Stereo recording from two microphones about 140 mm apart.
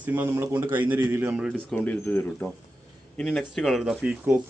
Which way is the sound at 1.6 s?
10° left (ahead or behind).